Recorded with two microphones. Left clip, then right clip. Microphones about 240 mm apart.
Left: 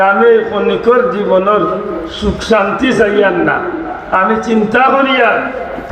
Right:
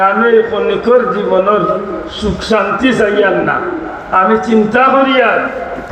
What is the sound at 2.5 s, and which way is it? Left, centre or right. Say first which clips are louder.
A man's voice: left 1 dB; left.